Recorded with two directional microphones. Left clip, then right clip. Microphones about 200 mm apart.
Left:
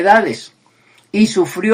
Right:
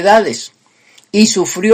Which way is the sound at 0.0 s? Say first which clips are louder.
Right 2 dB; 35° right (ahead or behind).